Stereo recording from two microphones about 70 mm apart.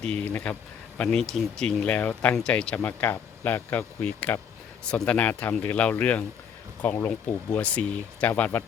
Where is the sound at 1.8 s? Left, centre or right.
Centre.